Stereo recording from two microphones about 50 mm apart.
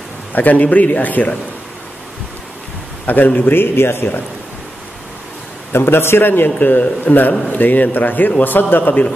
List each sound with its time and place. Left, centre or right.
0.3 s a man's voice: left
3.1 s a man's voice: left
5.7 s a man's voice: left